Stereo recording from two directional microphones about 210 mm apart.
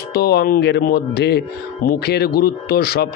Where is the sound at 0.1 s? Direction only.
50° left (ahead or behind).